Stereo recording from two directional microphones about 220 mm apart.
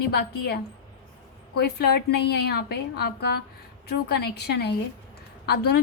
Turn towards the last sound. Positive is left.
turn(degrees=45)  # may be behind; listen again after turning